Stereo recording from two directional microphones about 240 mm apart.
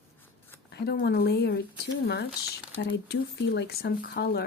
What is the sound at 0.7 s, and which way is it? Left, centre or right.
Speech, left.